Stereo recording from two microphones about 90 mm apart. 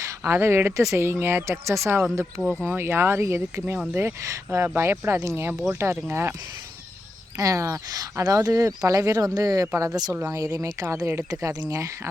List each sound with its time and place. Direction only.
0.3 s speech: 30° right (ahead or behind)
2.4 s speech: 5° left (ahead or behind)
2.6 s speech: 25° right (ahead or behind)
7.3 s speech: 40° right (ahead or behind)
10.3 s speech: 40° right (ahead or behind)